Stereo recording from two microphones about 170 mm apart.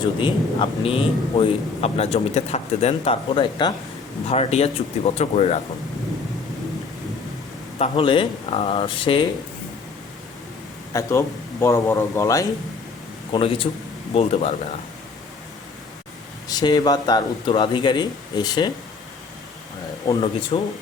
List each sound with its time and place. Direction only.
0.0 s speech: 30° left (ahead or behind)
7.8 s speech: 30° left (ahead or behind)
10.9 s a man's voice: 15° left (ahead or behind)
13.3 s speech: 30° left (ahead or behind)
16.5 s a man's voice: 25° left (ahead or behind)
20.5 s speech: 35° left (ahead or behind)